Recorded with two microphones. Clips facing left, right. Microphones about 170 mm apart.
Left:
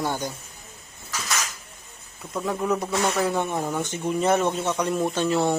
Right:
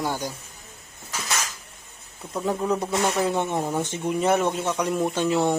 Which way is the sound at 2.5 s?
10° right (ahead or behind).